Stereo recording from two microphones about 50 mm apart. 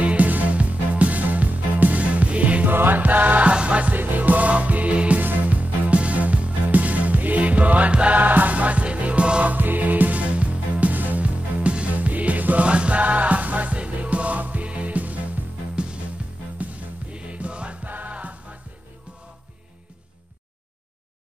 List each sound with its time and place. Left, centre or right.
0.0 s music: right
2.7 s music: right
3.9 s music: right
9.6 s music: right
17.1 s music: right
17.8 s music: right